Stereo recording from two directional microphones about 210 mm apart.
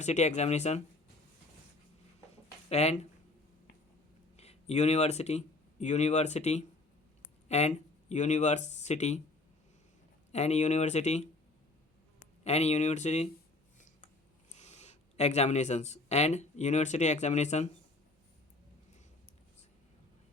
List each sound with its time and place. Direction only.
0.0 s speech: 35° left (ahead or behind)
2.3 s a sound: 30° left (ahead or behind)
4.4 s speech: 30° left (ahead or behind)
7.4 s a sound: 30° left (ahead or behind)
8.1 s speech: 35° left (ahead or behind)
10.3 s speech: 30° left (ahead or behind)
12.5 s speech: 30° left (ahead or behind)
14.5 s speech: 30° left (ahead or behind)